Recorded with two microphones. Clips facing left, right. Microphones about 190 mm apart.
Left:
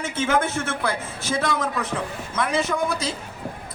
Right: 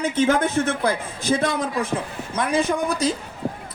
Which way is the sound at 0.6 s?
35° right (ahead or behind).